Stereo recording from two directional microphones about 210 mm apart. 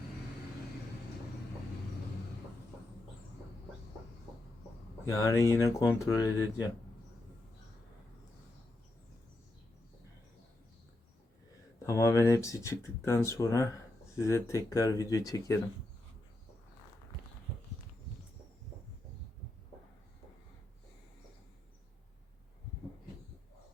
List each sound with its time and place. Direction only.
5.0 s speech: 15° left (ahead or behind)
11.8 s speech: 15° left (ahead or behind)